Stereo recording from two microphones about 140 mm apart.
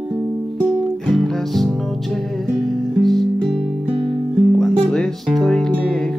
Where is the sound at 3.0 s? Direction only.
Centre (ahead or behind).